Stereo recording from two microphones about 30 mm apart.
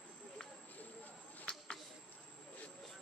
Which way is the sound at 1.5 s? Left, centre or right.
Left.